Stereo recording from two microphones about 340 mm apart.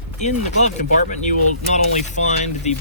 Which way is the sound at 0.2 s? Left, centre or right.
Left.